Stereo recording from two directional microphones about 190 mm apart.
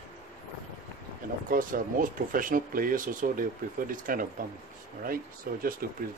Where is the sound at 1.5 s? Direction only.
45° right (ahead or behind).